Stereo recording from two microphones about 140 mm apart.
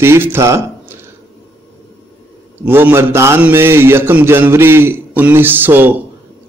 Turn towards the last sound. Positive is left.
turn(degrees=-15)  # may be behind; listen again after turning